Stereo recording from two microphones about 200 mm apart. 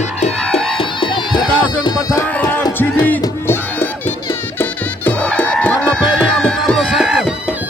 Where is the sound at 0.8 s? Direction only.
25° left (ahead or behind); by 7.3 s 5° right (ahead or behind).